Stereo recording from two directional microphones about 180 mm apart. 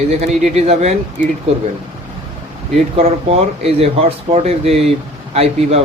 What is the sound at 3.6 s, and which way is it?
A man's voice, 35° right (ahead or behind).